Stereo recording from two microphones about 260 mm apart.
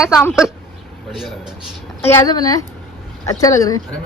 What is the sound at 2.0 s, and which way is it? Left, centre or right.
Speech, centre.